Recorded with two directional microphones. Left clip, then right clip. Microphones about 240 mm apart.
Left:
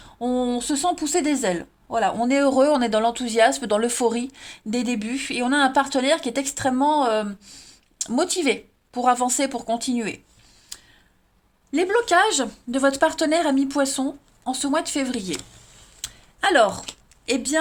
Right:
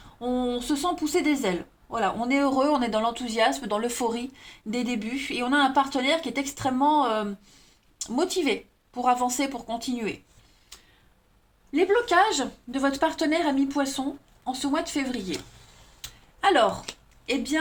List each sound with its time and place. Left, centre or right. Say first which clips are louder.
0.2 s speech: left 4 dB; left
11.7 s speech: left 2 dB; left
16.4 s speech: left 3 dB; left